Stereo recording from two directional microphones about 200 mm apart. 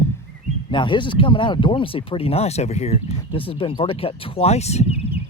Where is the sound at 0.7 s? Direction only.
25° left (ahead or behind).